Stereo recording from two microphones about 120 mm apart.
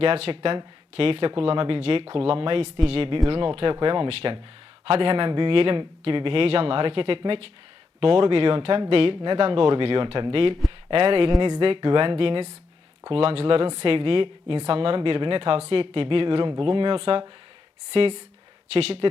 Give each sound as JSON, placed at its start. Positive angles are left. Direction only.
{"t": 0.0, "sound": "a woman's voice", "side_deg": -55}